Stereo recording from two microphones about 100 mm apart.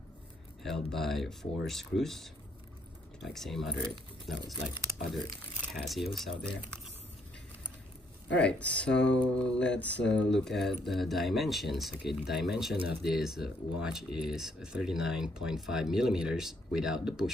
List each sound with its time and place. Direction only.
0.6 s speech: 5° left (ahead or behind)
4.9 s a sound: 30° right (ahead or behind)
5.9 s speech: centre (ahead or behind)
8.3 s speech: 10° left (ahead or behind); by 17.3 s 5° right (ahead or behind)